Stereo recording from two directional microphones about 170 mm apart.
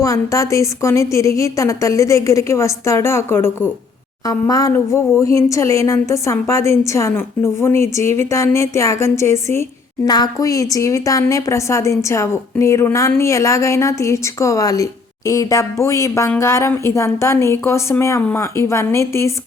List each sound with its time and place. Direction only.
0.0 s a woman's voice: 20° left (ahead or behind)